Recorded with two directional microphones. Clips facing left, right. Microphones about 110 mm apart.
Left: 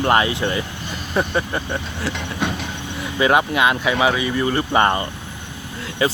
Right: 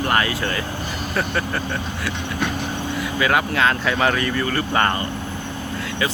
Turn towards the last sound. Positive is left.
turn(degrees=25)  # may be behind; listen again after turning